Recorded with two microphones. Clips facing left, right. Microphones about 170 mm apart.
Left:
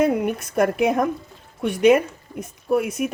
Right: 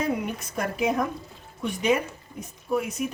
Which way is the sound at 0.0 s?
65° left (ahead or behind).